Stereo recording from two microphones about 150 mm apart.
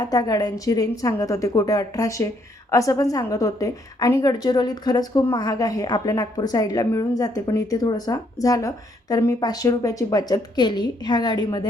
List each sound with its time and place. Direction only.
0.0 s a woman's voice: 25° left (ahead or behind)